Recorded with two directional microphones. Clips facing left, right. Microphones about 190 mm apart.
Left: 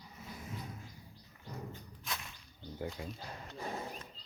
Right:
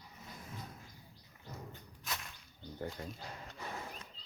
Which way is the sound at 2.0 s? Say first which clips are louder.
Even; centre (ahead or behind).